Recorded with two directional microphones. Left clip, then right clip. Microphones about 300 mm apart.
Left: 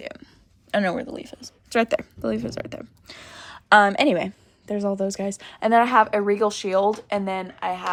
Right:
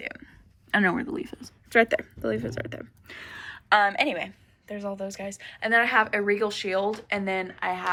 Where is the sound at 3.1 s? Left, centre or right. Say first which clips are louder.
Right 3 dB; centre.